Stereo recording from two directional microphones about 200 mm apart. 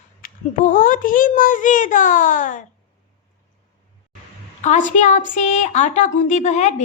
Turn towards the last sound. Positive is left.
turn(degrees=35)  # may be behind; listen again after turning